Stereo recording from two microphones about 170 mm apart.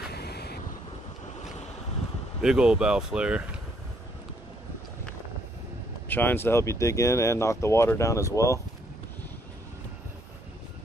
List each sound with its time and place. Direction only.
0.1 s vehicle: 70° left (ahead or behind)
2.4 s speech: 5° right (ahead or behind)
6.0 s speech: 10° left (ahead or behind)